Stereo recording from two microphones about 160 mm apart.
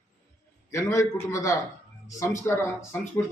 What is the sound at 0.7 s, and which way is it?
A man's voice, 20° left (ahead or behind).